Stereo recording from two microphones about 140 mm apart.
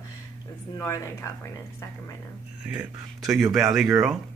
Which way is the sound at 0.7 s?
20° left (ahead or behind).